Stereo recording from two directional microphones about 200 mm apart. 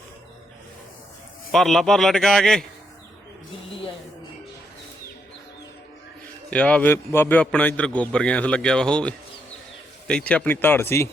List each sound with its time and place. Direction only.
1.5 s a man's voice: centre (ahead or behind)
6.5 s a man's voice: 5° left (ahead or behind)